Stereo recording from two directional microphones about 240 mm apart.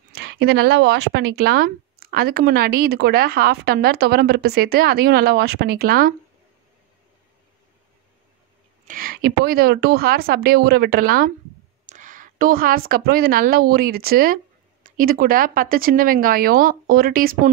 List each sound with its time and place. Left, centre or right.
0.1 s speech: right
8.8 s a woman's voice: right